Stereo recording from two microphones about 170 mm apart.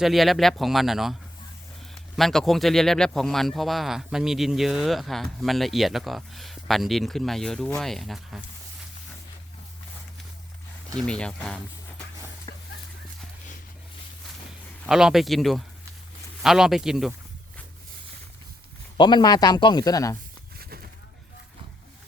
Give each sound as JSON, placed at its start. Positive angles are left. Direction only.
{"t": 0.0, "sound": "speech", "side_deg": 0}
{"t": 2.1, "sound": "speech", "side_deg": 0}
{"t": 11.0, "sound": "speech", "side_deg": 5}
{"t": 12.5, "sound": "a sound", "side_deg": 25}
{"t": 14.8, "sound": "speech", "side_deg": -5}
{"t": 18.9, "sound": "speech", "side_deg": 25}
{"t": 20.6, "sound": "a sound", "side_deg": -65}